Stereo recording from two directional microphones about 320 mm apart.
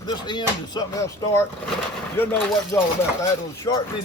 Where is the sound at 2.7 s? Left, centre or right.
Centre.